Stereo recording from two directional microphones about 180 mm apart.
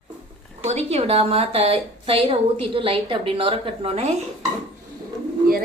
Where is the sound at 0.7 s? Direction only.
35° right (ahead or behind).